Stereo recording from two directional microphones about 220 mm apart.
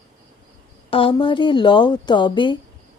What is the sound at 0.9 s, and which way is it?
Speech, 25° left (ahead or behind).